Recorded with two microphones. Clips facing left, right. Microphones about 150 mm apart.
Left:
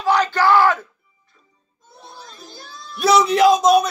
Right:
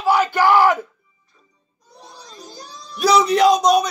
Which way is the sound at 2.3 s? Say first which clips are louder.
Right 2 dB; 20° right (ahead or behind).